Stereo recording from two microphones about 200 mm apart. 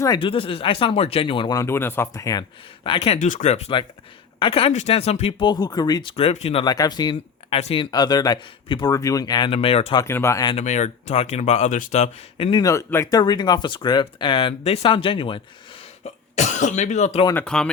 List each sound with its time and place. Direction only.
0.0 s speech: 25° left (ahead or behind)
2.8 s speech: 25° left (ahead or behind)
10.0 s speech: 15° left (ahead or behind)
10.5 s speech: 35° left (ahead or behind)
17.2 s speech: 5° left (ahead or behind)